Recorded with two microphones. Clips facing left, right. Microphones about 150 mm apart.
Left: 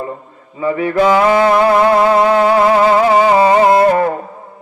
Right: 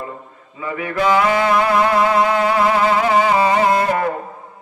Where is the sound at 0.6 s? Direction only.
30° left (ahead or behind).